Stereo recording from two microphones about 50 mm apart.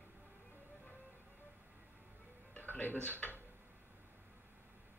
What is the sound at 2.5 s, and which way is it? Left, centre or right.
Music, left.